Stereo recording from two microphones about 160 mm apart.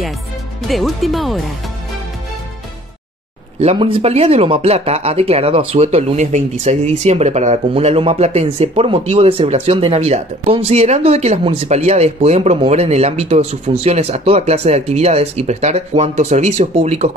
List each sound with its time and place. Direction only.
0.7 s speech: centre (ahead or behind)
3.7 s speech: 35° right (ahead or behind)